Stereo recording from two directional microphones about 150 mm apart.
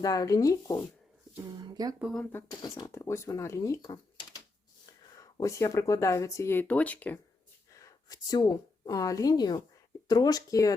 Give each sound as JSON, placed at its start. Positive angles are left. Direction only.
{"t": 0.0, "sound": "speech", "side_deg": 25}
{"t": 1.5, "sound": "speech", "side_deg": -25}
{"t": 2.0, "sound": "speech", "side_deg": 0}
{"t": 2.3, "sound": "speech", "side_deg": 25}
{"t": 7.8, "sound": "a woman's voice", "side_deg": 25}